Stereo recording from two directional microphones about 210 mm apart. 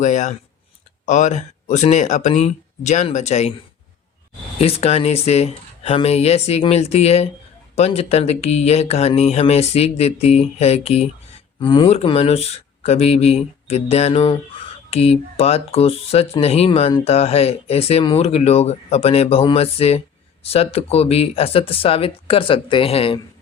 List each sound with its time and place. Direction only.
0.0 s speech: 35° left (ahead or behind)
4.5 s speech: 30° left (ahead or behind)